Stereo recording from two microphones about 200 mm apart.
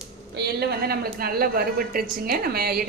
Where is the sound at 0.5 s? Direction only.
50° right (ahead or behind).